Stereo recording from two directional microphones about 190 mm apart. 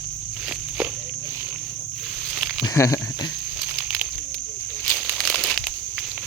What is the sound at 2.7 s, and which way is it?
Cricket, 15° left (ahead or behind).